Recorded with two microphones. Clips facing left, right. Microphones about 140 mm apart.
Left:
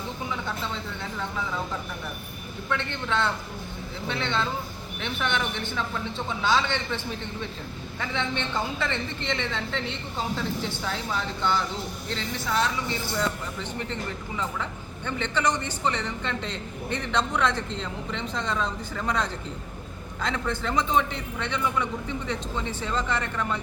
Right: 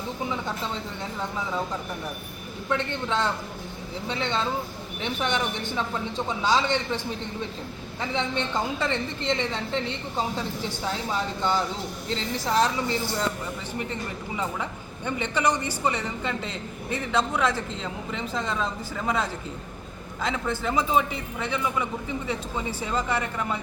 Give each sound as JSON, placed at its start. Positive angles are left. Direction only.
{"t": 2.6, "sound": "a woman's voice", "side_deg": -35}
{"t": 5.0, "sound": "a woman's voice", "side_deg": -40}
{"t": 8.1, "sound": "a woman's voice", "side_deg": -35}
{"t": 12.1, "sound": "a woman's voice", "side_deg": -35}
{"t": 14.3, "sound": "a woman's voice", "side_deg": -15}